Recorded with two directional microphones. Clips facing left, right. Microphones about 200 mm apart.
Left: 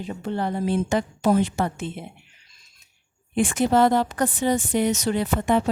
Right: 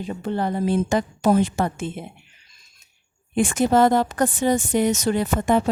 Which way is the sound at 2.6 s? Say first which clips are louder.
Right 1 dB; 45° right (ahead or behind).